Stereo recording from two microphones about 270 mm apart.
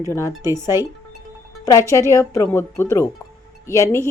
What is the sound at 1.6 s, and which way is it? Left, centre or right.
Speech, centre.